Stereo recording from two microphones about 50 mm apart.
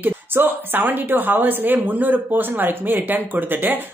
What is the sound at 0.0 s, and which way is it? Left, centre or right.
A woman's voice, right.